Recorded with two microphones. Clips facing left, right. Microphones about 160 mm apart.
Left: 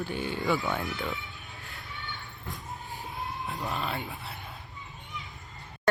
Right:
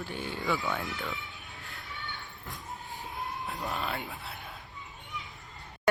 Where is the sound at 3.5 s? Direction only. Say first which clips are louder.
Left 2 dB; centre (ahead or behind).